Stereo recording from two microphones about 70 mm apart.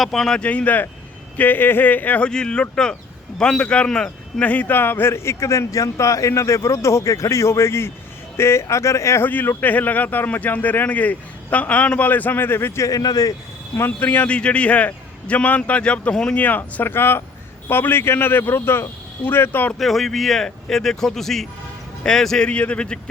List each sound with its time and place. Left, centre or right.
0.0 s a man's voice: centre; by 9.2 s left
9.2 s a man's voice: left
12.9 s speech: left
13.7 s a man's voice: left
14.3 s a man's voice: centre; by 19.7 s left
19.8 s a man's voice: centre